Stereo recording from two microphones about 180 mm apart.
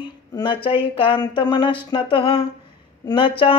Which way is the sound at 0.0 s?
25° left (ahead or behind).